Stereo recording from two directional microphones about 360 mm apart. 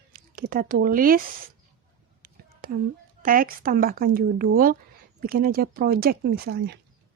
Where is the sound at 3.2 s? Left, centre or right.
Right.